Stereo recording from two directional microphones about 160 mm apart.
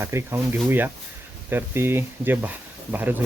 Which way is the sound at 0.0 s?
15° right (ahead or behind).